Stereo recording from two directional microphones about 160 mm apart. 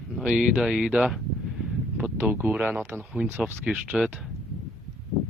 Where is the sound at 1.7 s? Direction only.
10° right (ahead or behind).